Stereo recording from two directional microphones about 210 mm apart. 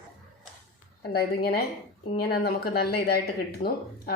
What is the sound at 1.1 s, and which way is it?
Speech, 45° left (ahead or behind).